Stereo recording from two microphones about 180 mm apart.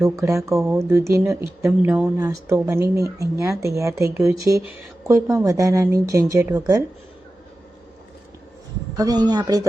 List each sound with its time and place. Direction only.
0.0 s speech: 15° right (ahead or behind)
9.0 s speech: 20° right (ahead or behind)